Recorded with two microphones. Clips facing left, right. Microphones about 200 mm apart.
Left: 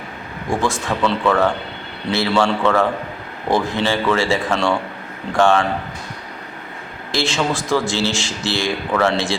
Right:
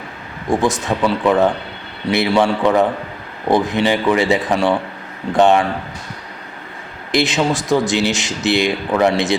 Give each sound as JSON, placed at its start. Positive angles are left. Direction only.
{"t": 0.5, "sound": "speech", "side_deg": -20}
{"t": 7.1, "sound": "speech", "side_deg": -20}